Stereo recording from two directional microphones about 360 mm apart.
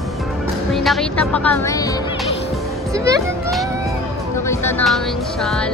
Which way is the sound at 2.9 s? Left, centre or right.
Centre.